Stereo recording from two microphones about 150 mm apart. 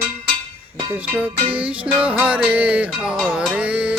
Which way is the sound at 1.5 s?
10° right (ahead or behind).